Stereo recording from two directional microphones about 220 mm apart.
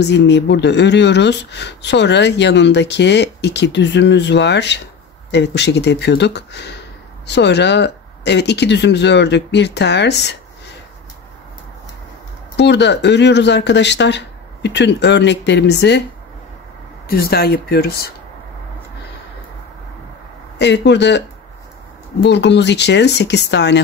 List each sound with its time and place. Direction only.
0.0 s speech: 50° left (ahead or behind)
12.5 s speech: 50° left (ahead or behind)
17.1 s speech: 45° left (ahead or behind)
20.5 s speech: 50° left (ahead or behind)
22.2 s speech: 50° left (ahead or behind)